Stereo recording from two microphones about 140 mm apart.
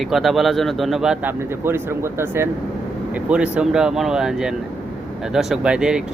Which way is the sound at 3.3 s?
5° right (ahead or behind).